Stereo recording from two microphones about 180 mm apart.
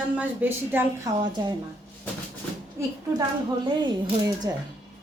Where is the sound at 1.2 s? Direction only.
25° right (ahead or behind).